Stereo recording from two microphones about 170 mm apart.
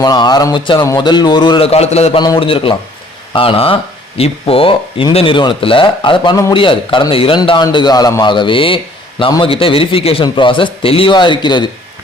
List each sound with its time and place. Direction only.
0.0 s speech: 25° left (ahead or behind)
2.2 s speech: 30° left (ahead or behind)